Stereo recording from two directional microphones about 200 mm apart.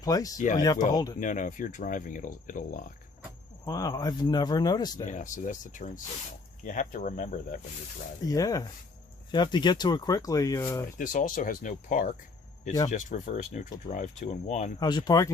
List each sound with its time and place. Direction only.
0.0 s speech: 15° left (ahead or behind)
1.2 s speech: 40° left (ahead or behind)
3.7 s speech: 20° left (ahead or behind)
5.0 s speech: 40° left (ahead or behind)
8.3 s speech: 15° left (ahead or behind)
10.9 s speech: 40° left (ahead or behind)
14.8 s speech: 20° left (ahead or behind)